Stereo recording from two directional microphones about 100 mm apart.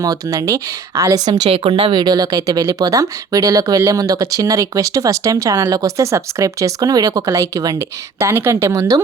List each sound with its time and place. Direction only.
0.0 s speech: 35° right (ahead or behind)
1.5 s speech: 75° right (ahead or behind)
1.9 s speech: 40° right (ahead or behind)